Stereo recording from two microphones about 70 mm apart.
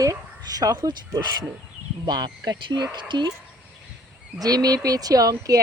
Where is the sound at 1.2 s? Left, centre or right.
Right.